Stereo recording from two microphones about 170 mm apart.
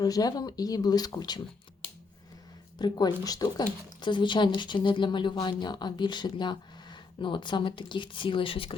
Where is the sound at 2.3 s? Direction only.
25° left (ahead or behind).